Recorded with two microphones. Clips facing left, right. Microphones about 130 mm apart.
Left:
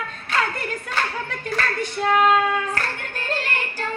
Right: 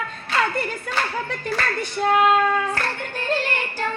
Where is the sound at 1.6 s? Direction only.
35° right (ahead or behind).